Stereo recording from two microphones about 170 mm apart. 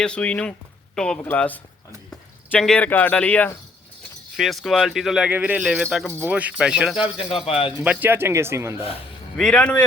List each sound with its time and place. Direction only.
0.0 s speech: 5° left (ahead or behind)
7.0 s speech: 30° left (ahead or behind)
7.9 s speech: 10° right (ahead or behind)
9.4 s speech: 5° left (ahead or behind)